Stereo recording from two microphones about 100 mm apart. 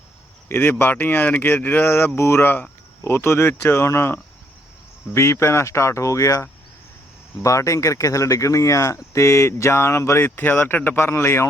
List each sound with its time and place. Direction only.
0.4 s speech: 20° left (ahead or behind)